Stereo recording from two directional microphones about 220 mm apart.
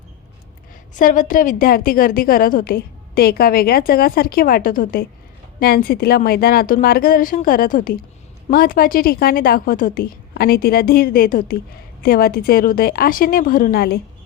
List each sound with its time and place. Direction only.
0.9 s a woman's voice: 35° left (ahead or behind)